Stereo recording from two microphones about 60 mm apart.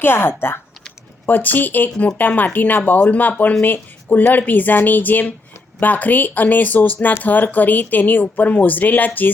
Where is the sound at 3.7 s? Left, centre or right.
Left.